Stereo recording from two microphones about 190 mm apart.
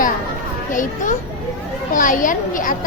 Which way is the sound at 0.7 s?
45° left (ahead or behind).